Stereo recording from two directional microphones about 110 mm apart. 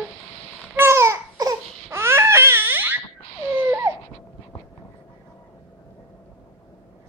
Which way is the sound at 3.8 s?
25° right (ahead or behind).